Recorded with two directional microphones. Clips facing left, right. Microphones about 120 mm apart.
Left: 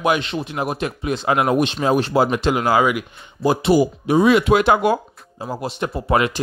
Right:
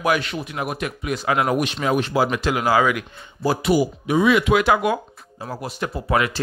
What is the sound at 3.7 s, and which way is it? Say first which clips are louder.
Speech: left 3 dB; 35° left (ahead or behind).